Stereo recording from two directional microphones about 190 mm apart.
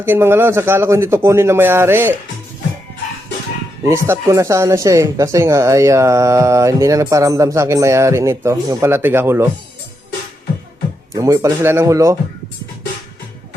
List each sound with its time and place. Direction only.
0.0 s speech: 10° right (ahead or behind)
3.8 s speech: 15° right (ahead or behind)
11.1 s speech: 15° right (ahead or behind)